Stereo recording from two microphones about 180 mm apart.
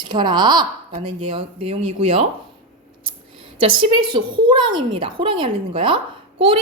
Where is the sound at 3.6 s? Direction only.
30° right (ahead or behind).